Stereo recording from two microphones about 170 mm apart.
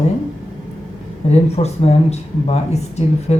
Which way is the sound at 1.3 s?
40° left (ahead or behind).